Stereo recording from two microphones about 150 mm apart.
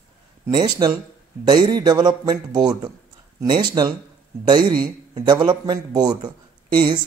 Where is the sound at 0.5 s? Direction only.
30° right (ahead or behind).